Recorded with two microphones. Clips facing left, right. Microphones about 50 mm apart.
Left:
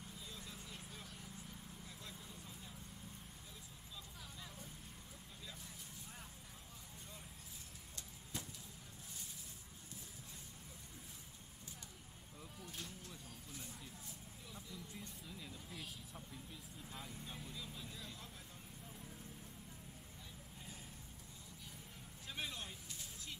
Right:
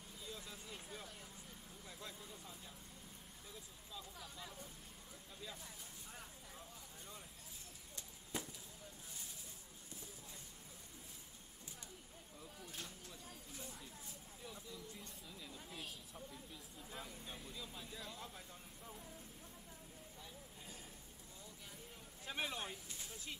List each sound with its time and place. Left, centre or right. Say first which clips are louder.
4.2 s vehicle: right 2 dB; centre
7.9 s chop: right 3 dB; centre
12.4 s a sound: left 1 dB; centre
14.5 s vehicle: left 1 dB; centre
15.5 s a sound: even; centre
16.9 s vehicle: right 1 dB; centre
22.2 s vehicle: right 4 dB; right